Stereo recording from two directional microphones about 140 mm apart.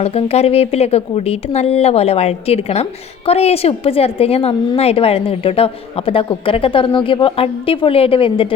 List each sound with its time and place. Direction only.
0.0 s a woman's voice: 45° left (ahead or behind)